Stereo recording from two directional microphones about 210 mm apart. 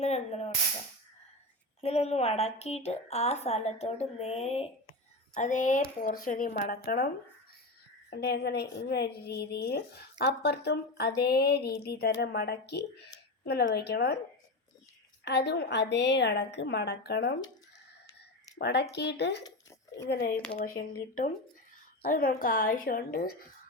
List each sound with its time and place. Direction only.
0.0 s a sound: 30° left (ahead or behind)
1.8 s a woman's voice: 30° left (ahead or behind); by 7.1 s 50° left (ahead or behind)
8.1 s a woman's voice: 50° left (ahead or behind)
15.2 s a woman's voice: 55° left (ahead or behind)
18.6 s a woman's voice: 55° left (ahead or behind)
20.3 s speech: 5° left (ahead or behind)
20.6 s a woman's voice: 40° left (ahead or behind)